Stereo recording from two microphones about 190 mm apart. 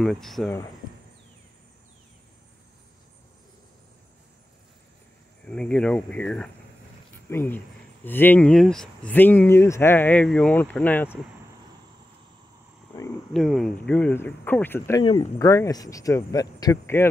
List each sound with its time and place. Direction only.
0.0 s speech: centre (ahead or behind)
5.5 s speech: 5° left (ahead or behind)
13.3 s speech: centre (ahead or behind)